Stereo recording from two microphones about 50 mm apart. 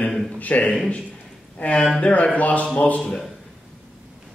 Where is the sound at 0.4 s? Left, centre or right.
Left.